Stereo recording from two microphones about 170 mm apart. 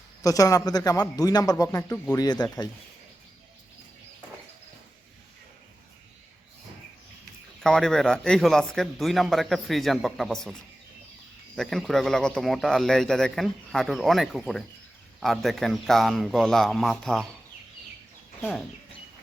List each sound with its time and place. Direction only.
0.2 s a man's voice: 20° left (ahead or behind)
7.6 s speech: 5° left (ahead or behind)